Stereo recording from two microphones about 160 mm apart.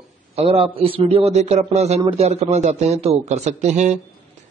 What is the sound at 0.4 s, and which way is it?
A man's voice, 40° right (ahead or behind).